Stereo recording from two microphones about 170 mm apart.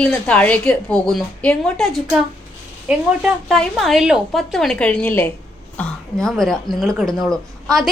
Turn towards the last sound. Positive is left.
turn(degrees=0)  # may be behind; listen again after turning